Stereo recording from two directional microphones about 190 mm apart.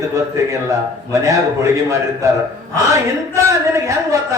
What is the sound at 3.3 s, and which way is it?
Speech, 15° right (ahead or behind).